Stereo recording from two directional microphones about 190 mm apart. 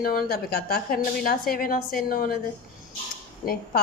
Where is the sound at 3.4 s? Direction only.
50° left (ahead or behind).